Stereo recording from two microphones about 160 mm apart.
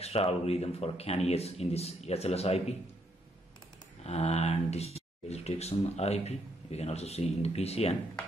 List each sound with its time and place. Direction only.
0.0 s speech: 40° left (ahead or behind)
4.0 s speech: 40° left (ahead or behind)